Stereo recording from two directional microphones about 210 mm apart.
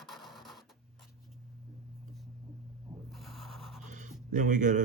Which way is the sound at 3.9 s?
35° right (ahead or behind).